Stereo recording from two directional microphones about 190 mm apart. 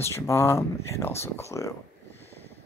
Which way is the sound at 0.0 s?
15° left (ahead or behind).